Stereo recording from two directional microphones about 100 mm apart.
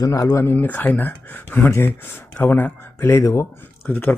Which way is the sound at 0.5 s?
15° left (ahead or behind).